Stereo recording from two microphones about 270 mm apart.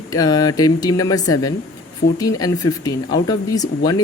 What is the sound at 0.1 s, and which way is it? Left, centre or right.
Speech, centre.